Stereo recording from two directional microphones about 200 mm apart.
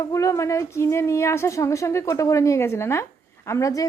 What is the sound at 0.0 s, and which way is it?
A woman's voice, 15° left (ahead or behind).